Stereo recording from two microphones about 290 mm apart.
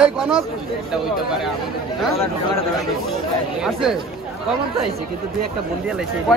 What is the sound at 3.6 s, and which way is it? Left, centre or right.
Speech, centre.